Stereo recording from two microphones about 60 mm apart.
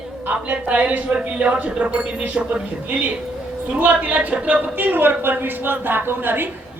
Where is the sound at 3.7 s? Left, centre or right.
Right.